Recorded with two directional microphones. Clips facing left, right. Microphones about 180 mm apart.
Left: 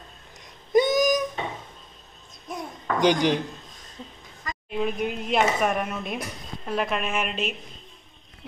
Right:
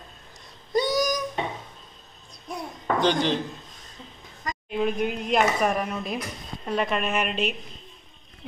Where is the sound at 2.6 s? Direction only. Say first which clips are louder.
Left 1 dB; 15° left (ahead or behind).